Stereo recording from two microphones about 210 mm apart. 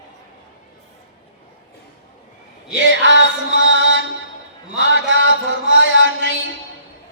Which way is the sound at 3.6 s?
60° right (ahead or behind).